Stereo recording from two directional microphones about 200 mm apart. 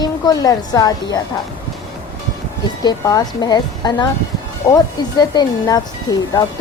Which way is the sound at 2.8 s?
20° left (ahead or behind).